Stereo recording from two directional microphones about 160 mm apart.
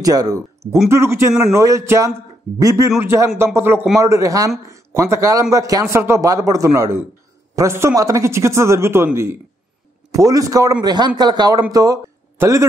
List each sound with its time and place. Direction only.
0.0 s a man's voice: 25° right (ahead or behind)